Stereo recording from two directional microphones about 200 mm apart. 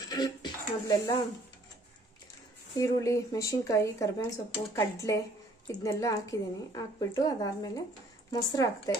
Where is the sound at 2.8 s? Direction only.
15° left (ahead or behind).